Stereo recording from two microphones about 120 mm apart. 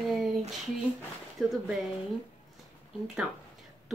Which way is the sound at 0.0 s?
Centre (ahead or behind).